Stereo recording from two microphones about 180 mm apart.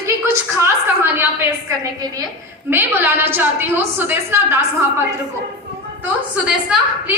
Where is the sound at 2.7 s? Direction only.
10° right (ahead or behind).